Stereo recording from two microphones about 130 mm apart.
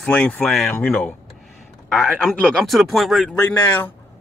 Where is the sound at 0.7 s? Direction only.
15° left (ahead or behind).